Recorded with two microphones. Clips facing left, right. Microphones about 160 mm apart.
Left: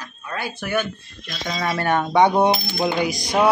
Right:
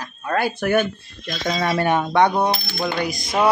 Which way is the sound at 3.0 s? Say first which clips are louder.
Left 2 dB; 85° left.